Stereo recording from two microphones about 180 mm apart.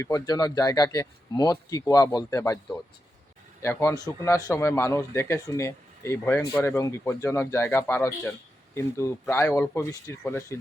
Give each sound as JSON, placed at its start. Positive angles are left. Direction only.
{"t": 0.0, "sound": "speech", "side_deg": 20}
{"t": 3.6, "sound": "a man's voice", "side_deg": 15}